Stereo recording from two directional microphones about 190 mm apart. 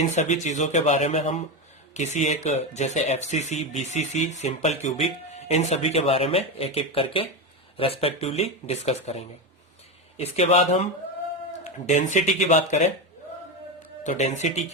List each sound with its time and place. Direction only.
0.2 s speech: 40° left (ahead or behind)
14.0 s speech: 40° left (ahead or behind)